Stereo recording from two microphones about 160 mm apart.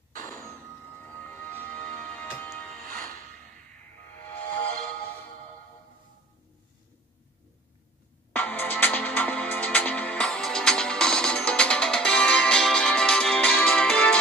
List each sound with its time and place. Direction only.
1.0 s music: 10° left (ahead or behind)
2.9 s music: 60° right (ahead or behind)
4.0 s music: 15° left (ahead or behind)
8.3 s music: 10° left (ahead or behind)